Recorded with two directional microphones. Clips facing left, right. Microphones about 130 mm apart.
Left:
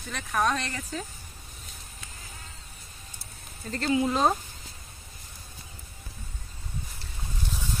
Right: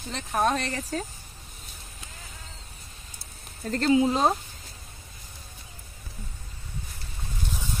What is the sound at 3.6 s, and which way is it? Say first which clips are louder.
Speech: right 5 dB; 45° right (ahead or behind).